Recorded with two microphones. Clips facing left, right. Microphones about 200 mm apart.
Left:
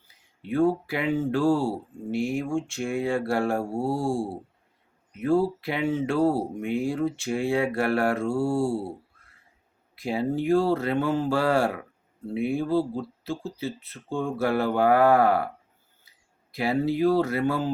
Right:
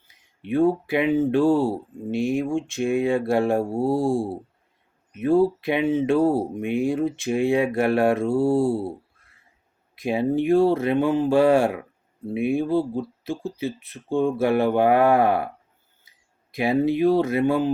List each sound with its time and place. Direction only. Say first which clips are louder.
0.4 s speech: right 3 dB; 20° right (ahead or behind)
9.9 s speech: right 4 dB; 20° right (ahead or behind)
16.5 s speech: right 4 dB; 20° right (ahead or behind)